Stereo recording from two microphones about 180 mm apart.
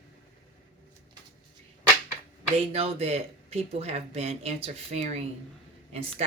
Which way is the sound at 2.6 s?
35° right (ahead or behind).